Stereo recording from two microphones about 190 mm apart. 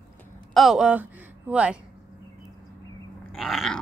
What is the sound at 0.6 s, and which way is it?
Speech, 5° right (ahead or behind).